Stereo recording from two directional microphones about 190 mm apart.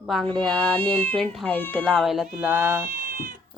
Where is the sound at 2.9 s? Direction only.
45° right (ahead or behind).